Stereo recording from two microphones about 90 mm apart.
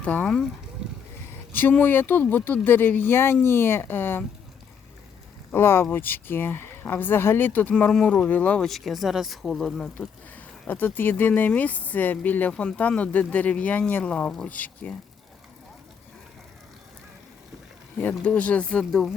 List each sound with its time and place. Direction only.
0.0 s speech: 15° left (ahead or behind)
1.5 s speech: 20° left (ahead or behind)
5.5 s speech: 25° left (ahead or behind)
8.6 s speech: centre (ahead or behind)
10.7 s speech: 20° left (ahead or behind)
18.2 s speech: 15° left (ahead or behind)